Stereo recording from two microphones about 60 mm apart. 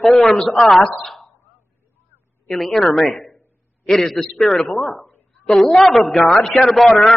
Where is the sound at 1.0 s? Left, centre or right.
Centre.